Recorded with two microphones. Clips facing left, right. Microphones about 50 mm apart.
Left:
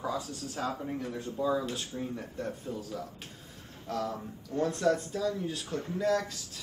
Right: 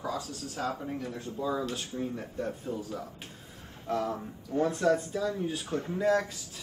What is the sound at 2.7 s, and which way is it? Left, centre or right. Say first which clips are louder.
Speech: right 2 dB; centre.